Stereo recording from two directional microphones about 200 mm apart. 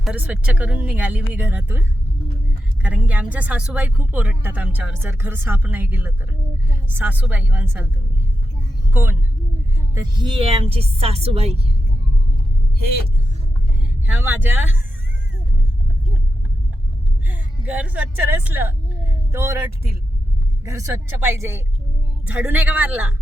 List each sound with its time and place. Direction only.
0.0 s speech: 5° right (ahead or behind)
2.8 s speech: 5° right (ahead or behind)
8.9 s speech: 10° right (ahead or behind)
9.9 s speech: 20° right (ahead or behind)
13.8 s speech: 10° right (ahead or behind)
17.2 s a woman's voice: 10° right (ahead or behind)
20.7 s speech: 15° right (ahead or behind)